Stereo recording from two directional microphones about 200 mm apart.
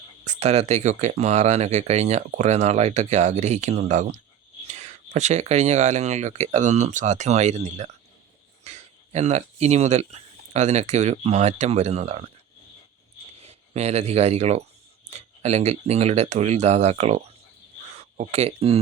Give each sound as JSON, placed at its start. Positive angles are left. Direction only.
{"t": 0.3, "sound": "speech", "side_deg": -35}
{"t": 13.4, "sound": "speech", "side_deg": -30}